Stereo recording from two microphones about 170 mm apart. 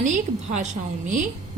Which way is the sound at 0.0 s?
45° right (ahead or behind).